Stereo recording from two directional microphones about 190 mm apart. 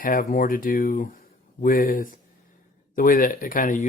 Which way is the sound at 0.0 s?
45° left (ahead or behind).